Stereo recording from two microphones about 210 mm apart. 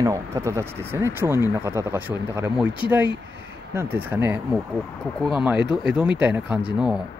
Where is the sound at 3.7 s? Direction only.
10° right (ahead or behind).